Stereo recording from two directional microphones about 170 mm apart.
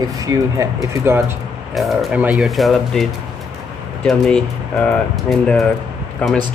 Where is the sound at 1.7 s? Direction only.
Centre (ahead or behind).